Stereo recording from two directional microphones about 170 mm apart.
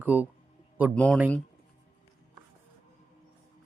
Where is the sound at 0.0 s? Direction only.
10° right (ahead or behind).